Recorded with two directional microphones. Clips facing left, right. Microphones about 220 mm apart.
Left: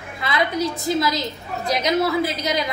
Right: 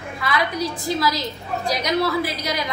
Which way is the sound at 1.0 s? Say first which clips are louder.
Left 1 dB; 25° left (ahead or behind).